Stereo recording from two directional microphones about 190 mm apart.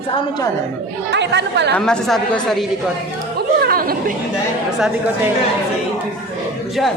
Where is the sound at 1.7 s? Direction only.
5° left (ahead or behind).